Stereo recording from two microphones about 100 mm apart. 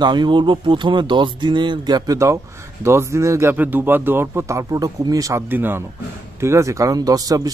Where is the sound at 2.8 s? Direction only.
25° right (ahead or behind).